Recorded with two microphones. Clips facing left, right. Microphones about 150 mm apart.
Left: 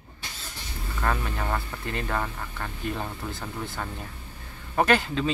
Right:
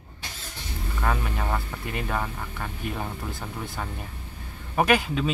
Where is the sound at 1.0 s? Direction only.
10° right (ahead or behind).